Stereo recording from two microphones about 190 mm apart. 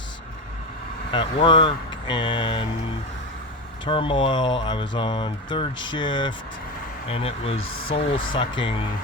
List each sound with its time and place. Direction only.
1.1 s speech: 25° left (ahead or behind)
3.8 s speech: 25° left (ahead or behind)
7.6 s speech: 90° left
7.9 s speech: 30° left (ahead or behind)